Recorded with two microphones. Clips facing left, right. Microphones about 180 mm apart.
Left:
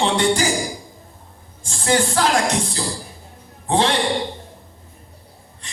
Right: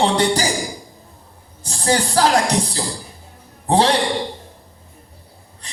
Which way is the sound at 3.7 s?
35° right (ahead or behind).